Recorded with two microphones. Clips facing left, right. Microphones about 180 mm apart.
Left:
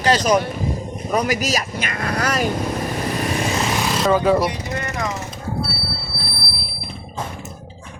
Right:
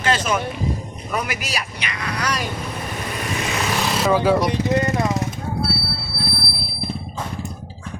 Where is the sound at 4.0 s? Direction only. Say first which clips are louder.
Left 1 dB; 5° right (ahead or behind).